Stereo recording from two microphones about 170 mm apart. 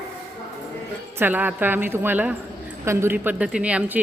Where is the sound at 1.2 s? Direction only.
10° right (ahead or behind).